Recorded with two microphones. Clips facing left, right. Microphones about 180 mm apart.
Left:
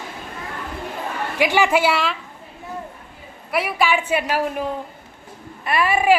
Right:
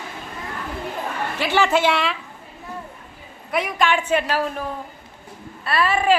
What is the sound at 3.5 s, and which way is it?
A woman's voice, 5° left (ahead or behind).